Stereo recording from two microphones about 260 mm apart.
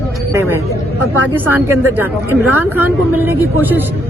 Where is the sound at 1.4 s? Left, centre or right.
Centre.